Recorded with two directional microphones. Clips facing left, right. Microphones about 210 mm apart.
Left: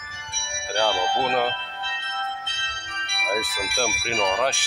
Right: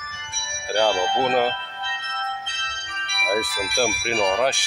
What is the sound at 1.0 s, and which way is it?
Speech, centre (ahead or behind).